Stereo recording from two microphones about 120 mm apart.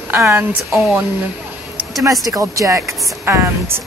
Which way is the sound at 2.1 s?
30° right (ahead or behind).